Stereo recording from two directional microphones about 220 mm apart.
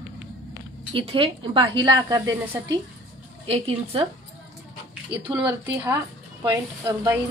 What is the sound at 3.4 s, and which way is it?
Speech, 25° right (ahead or behind).